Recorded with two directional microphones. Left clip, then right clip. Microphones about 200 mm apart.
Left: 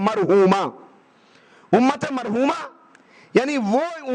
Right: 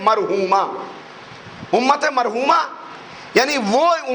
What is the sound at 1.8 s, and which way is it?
A man's voice, 50° left (ahead or behind).